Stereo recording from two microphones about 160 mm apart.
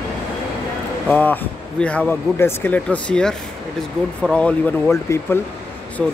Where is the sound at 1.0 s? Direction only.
10° left (ahead or behind).